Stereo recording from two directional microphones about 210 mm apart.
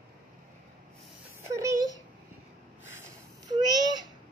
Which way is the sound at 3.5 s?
20° right (ahead or behind).